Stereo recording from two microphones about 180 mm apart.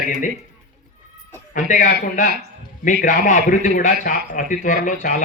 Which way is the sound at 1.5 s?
45° left (ahead or behind).